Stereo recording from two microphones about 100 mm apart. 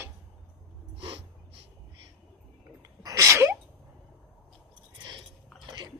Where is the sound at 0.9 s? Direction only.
65° right (ahead or behind).